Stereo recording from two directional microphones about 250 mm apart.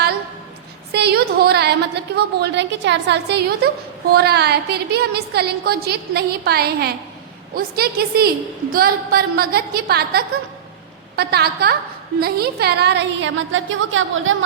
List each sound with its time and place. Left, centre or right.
0.9 s a woman's voice: right